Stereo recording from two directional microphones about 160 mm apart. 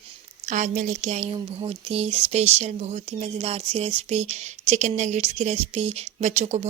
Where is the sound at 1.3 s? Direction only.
35° right (ahead or behind).